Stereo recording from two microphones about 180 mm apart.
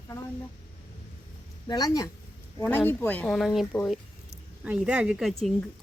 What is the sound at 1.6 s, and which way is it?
Speech, 20° left (ahead or behind).